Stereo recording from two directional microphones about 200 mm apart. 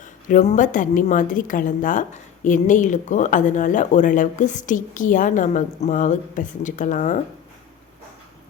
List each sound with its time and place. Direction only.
0.0 s a woman's voice: 40° left (ahead or behind)